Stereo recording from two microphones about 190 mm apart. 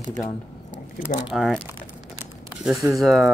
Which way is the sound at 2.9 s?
Centre (ahead or behind).